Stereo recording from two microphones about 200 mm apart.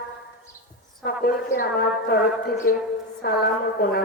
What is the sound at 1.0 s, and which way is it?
A woman's voice, 50° left (ahead or behind).